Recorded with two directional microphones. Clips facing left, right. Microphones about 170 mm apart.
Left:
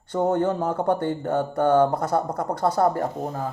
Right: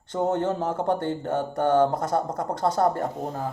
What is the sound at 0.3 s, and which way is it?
Speech, 20° right (ahead or behind).